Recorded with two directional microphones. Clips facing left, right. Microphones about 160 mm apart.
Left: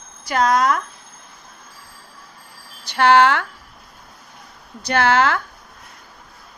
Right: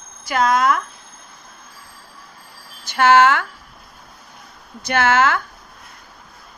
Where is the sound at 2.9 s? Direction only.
35° left (ahead or behind).